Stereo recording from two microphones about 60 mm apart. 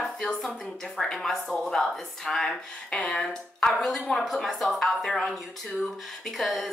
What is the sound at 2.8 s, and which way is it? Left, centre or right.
A woman's voice, centre.